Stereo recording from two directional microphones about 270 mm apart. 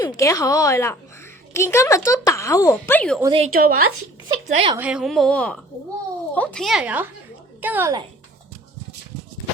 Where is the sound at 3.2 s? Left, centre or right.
Centre.